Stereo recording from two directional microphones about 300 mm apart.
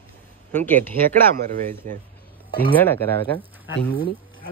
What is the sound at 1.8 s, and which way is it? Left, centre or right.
Speech, right.